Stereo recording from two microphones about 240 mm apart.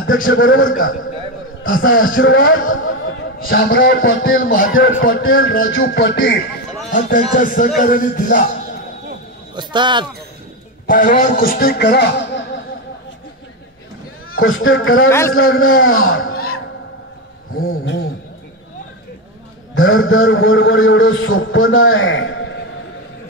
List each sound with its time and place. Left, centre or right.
0.3 s a man's voice: left
1.8 s a man's voice: left
5.7 s music: left
6.9 s a man's voice: left
9.6 s speech: centre
10.9 s a man's voice: left
14.4 s a man's voice: left
15.0 s a man's voice: centre
15.3 s a man's voice: left
17.6 s music: left
19.7 s a man's voice: left